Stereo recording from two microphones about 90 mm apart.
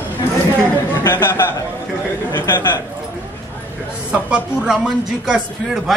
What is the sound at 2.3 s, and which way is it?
Speech, 55° left (ahead or behind).